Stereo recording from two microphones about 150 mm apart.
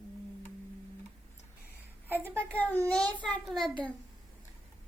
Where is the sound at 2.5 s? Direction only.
10° left (ahead or behind).